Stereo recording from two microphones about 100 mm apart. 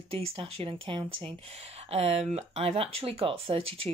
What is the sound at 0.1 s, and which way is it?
Speech, 70° right (ahead or behind).